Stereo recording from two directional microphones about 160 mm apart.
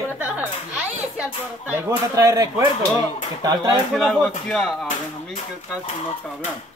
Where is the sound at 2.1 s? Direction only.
20° right (ahead or behind).